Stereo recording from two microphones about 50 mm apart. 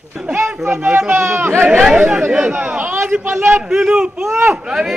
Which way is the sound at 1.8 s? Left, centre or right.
Centre.